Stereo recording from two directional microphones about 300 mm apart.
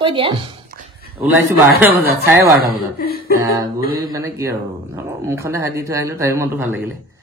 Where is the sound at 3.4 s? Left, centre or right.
Centre.